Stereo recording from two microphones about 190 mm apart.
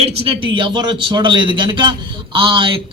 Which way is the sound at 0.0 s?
30° right (ahead or behind).